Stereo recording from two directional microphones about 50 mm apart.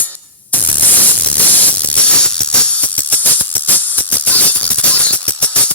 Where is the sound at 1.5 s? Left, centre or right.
Left.